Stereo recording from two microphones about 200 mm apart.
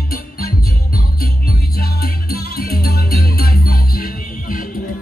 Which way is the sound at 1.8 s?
50° left (ahead or behind).